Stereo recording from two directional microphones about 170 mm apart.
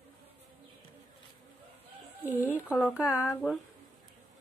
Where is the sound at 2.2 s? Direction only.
10° right (ahead or behind).